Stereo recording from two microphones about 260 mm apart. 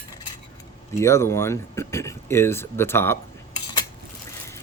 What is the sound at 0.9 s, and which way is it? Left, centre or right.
Speech, centre.